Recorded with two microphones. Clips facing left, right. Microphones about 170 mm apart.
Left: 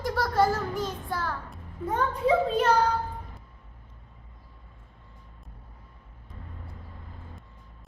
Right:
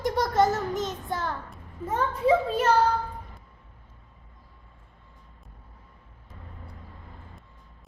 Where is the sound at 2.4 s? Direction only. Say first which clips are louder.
Even; 5° right (ahead or behind).